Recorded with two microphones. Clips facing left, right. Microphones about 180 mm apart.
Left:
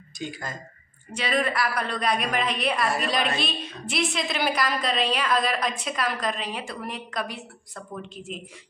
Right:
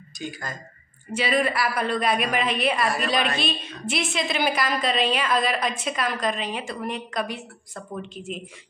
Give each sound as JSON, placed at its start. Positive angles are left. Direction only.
{"t": 0.2, "sound": "speech", "side_deg": 25}
{"t": 1.1, "sound": "a woman's voice", "side_deg": -5}